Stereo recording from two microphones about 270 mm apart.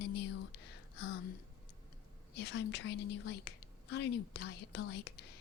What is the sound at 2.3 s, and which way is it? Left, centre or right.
Speech, left.